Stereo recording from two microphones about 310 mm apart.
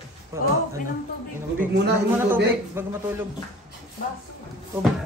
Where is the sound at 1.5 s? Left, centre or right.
Right.